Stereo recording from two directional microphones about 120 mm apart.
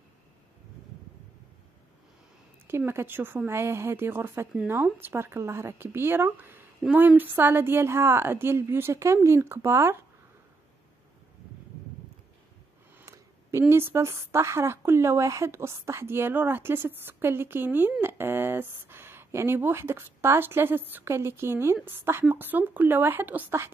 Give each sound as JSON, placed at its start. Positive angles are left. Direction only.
{"t": 2.6, "sound": "a woman's voice", "side_deg": -20}
{"t": 13.0, "sound": "a woman's voice", "side_deg": -25}